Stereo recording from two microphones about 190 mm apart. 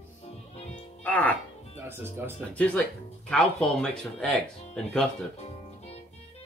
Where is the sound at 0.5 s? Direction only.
35° left (ahead or behind).